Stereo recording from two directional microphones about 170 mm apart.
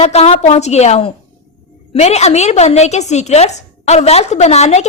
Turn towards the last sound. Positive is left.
turn(degrees=40)  # may be behind; listen again after turning